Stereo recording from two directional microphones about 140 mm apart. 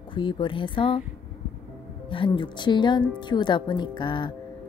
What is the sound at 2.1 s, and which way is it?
Speech, 35° left (ahead or behind).